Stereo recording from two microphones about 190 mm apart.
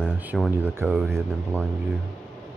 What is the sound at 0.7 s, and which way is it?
Speech, 10° right (ahead or behind).